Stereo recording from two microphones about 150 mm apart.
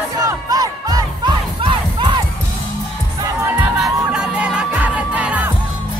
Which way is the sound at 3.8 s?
5° right (ahead or behind).